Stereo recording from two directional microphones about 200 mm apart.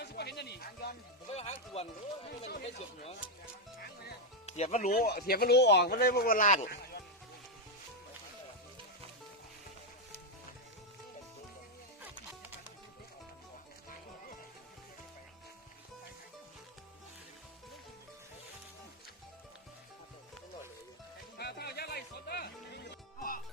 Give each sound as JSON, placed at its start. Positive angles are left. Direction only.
{"t": 0.0, "sound": "music", "side_deg": 55}
{"t": 1.3, "sound": "speech", "side_deg": 30}
{"t": 4.4, "sound": "speech", "side_deg": 35}
{"t": 4.9, "sound": "speech", "side_deg": 50}
{"t": 21.3, "sound": "music", "side_deg": 55}